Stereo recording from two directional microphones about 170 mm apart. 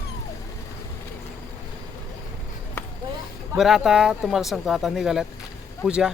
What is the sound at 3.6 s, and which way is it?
Speech, centre (ahead or behind).